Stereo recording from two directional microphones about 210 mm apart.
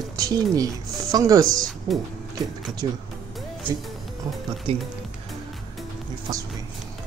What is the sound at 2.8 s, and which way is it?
Speech, 25° right (ahead or behind).